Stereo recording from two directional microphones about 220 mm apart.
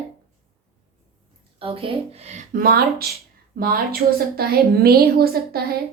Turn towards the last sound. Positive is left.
turn(degrees=-45)  # may be behind; listen again after turning